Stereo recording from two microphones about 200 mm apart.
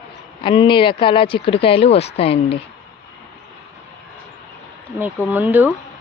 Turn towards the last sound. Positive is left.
turn(degrees=-10)  # may be behind; listen again after turning